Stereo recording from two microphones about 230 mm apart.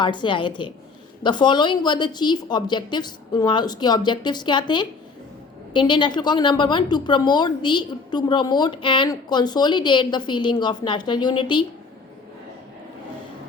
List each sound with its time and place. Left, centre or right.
0.0 s a woman's voice: centre